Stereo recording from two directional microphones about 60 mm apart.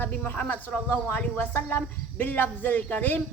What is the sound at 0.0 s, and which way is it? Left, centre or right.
A woman's voice, left.